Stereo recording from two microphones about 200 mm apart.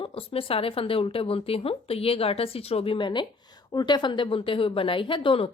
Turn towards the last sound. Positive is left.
turn(degrees=25)  # may be behind; listen again after turning